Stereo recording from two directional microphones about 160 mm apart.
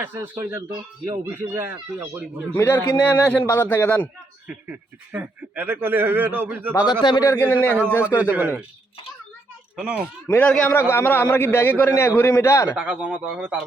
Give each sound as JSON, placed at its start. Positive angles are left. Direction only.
{"t": 0.0, "sound": "a man's voice", "side_deg": -15}
{"t": 2.5, "sound": "a man's voice", "side_deg": 15}
{"t": 4.4, "sound": "a man's voice", "side_deg": -10}
{"t": 7.0, "sound": "a man's voice", "side_deg": 25}
{"t": 8.3, "sound": "a man's voice", "side_deg": -10}
{"t": 9.7, "sound": "a man's voice", "side_deg": -10}
{"t": 10.2, "sound": "a man's voice", "side_deg": 10}
{"t": 12.7, "sound": "a man's voice", "side_deg": -5}